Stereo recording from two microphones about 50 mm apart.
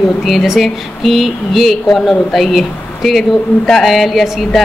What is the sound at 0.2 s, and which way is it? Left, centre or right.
A woman's voice, centre.